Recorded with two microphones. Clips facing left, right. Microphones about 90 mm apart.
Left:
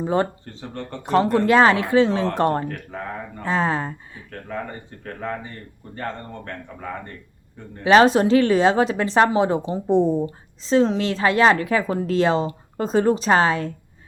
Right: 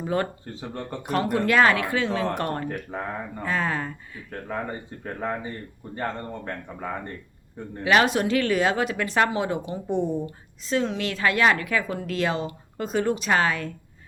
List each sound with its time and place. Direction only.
0.0 s speech: 25° left (ahead or behind)
2.9 s speech: 15° right (ahead or behind)
3.4 s speech: 25° left (ahead or behind)
5.9 s speech: 15° right (ahead or behind)
7.9 s a woman's voice: 30° left (ahead or behind)